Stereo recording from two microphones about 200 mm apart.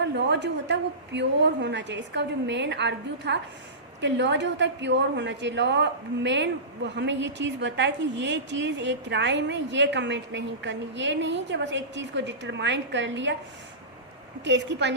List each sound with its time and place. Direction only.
0.0 s a woman's voice: 60° right (ahead or behind)
14.4 s a woman's voice: 60° right (ahead or behind)